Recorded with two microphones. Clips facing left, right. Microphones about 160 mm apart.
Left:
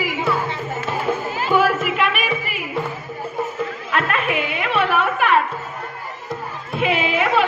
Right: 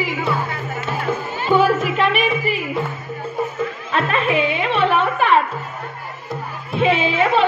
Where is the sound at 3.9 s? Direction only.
30° right (ahead or behind).